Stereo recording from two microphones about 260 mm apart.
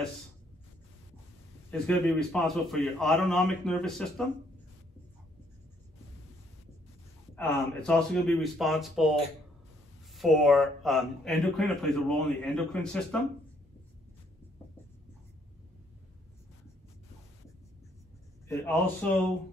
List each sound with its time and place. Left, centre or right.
1.7 s speech: centre
7.3 s speech: centre
10.1 s speech: centre
18.5 s speech: centre